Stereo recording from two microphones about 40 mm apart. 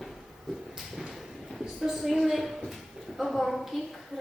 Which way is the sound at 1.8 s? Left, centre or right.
Centre.